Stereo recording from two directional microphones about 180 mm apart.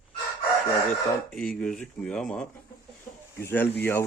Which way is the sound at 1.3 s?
5° left (ahead or behind).